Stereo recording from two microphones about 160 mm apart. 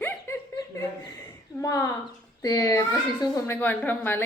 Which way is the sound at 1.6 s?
20° left (ahead or behind).